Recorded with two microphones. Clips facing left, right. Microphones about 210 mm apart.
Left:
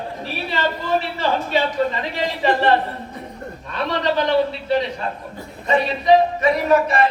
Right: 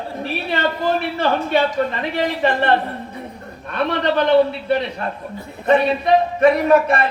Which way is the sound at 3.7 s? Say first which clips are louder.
Right 2 dB; 55° right (ahead or behind).